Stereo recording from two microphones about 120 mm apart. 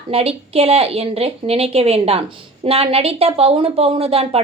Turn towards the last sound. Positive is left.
turn(degrees=-55)  # may be behind; listen again after turning